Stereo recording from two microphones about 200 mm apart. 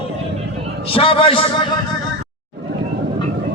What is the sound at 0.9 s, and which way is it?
Speech, 25° left (ahead or behind).